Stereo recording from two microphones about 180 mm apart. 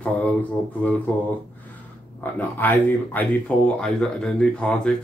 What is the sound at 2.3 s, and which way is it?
Speech, 10° left (ahead or behind).